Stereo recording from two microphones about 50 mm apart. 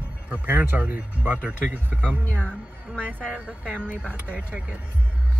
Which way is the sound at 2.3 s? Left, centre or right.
Left.